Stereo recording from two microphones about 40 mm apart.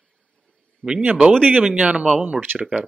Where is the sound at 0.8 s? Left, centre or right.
Left.